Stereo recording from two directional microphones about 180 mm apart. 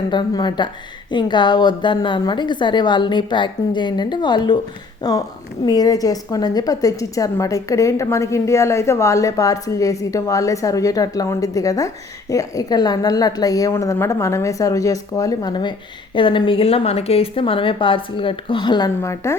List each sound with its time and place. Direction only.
0.1 s a woman's voice: 25° left (ahead or behind)
5.6 s a woman's voice: 20° left (ahead or behind)